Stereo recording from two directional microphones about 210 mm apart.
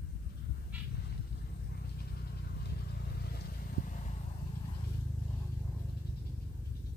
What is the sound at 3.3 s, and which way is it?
Vehicle, 45° left (ahead or behind).